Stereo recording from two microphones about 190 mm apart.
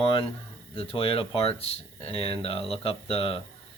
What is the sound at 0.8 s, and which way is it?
Speech, 30° left (ahead or behind).